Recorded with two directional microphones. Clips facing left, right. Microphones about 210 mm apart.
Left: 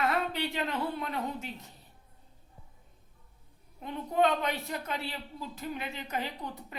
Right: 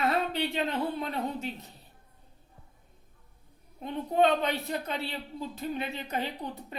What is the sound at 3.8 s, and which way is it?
A woman's voice, 30° right (ahead or behind).